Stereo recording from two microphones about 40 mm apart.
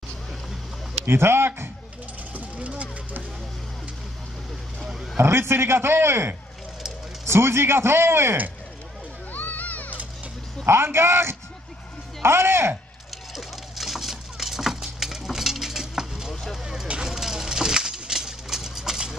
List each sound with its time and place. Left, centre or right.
1.0 s speech: right
2.3 s vehicle: right
5.1 s a man's voice: right
9.3 s music: left
10.6 s a man's voice: right
13.3 s a sound: centre